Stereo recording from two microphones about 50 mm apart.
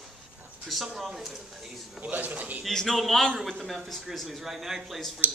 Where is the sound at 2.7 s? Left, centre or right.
Centre.